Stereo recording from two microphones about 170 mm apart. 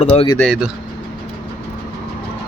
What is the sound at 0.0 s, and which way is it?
Speech, 35° left (ahead or behind).